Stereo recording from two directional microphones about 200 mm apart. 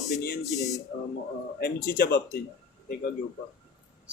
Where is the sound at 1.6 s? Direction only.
50° left (ahead or behind).